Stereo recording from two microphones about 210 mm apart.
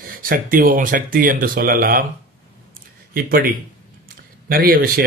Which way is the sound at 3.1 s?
45° right (ahead or behind).